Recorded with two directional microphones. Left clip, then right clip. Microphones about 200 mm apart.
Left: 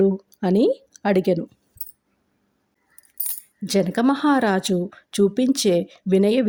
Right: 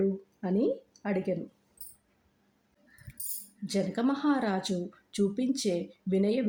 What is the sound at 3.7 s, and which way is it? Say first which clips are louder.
Speech: left 10 dB; 35° left (ahead or behind).